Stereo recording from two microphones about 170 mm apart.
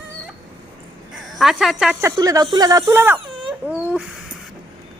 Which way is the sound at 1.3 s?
Centre (ahead or behind).